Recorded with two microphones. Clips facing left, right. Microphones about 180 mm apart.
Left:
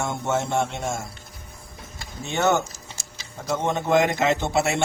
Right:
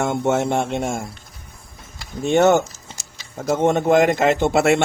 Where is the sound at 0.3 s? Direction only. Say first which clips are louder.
Right 3 dB; 55° right (ahead or behind).